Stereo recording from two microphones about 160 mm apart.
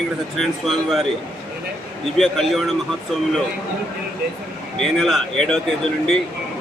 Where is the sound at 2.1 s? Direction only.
Centre (ahead or behind).